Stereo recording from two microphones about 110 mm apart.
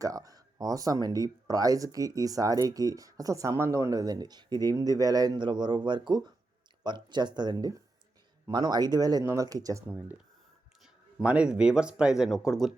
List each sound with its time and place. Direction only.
0.0 s speech: 30° right (ahead or behind)
9.9 s speech: 15° right (ahead or behind)